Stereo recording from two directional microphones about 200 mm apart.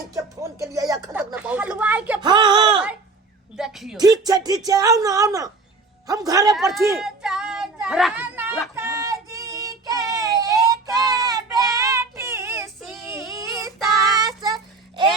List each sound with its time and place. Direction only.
0.1 s speech: 15° right (ahead or behind)
1.1 s speech: 5° right (ahead or behind)
2.2 s speech: 25° right (ahead or behind)
3.6 s a woman's voice: centre (ahead or behind)
3.9 s speech: 20° right (ahead or behind)
7.0 s speech: 5° right (ahead or behind)
8.7 s child singing: 15° right (ahead or behind)
12.8 s child singing: centre (ahead or behind)
13.1 s child singing: 15° right (ahead or behind)